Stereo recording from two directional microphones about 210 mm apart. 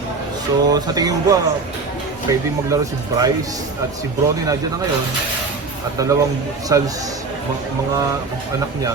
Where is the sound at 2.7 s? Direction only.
15° right (ahead or behind).